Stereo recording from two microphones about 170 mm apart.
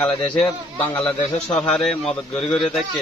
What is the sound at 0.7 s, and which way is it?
A man's voice, 10° left (ahead or behind).